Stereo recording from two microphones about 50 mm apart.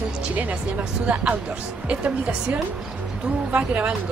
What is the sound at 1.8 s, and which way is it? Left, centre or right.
Speech, right.